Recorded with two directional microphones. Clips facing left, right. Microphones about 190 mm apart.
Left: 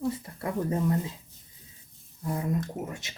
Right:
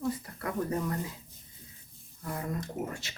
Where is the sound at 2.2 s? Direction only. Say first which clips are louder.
Left 6 dB; 20° left (ahead or behind).